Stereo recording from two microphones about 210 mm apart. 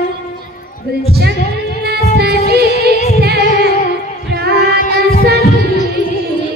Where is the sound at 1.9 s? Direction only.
50° right (ahead or behind).